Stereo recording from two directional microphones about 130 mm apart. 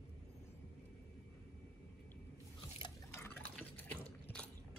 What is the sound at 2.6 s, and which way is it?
Drip, 35° left (ahead or behind).